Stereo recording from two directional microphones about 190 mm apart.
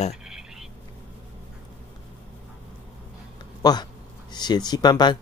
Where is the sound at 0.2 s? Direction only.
5° right (ahead or behind).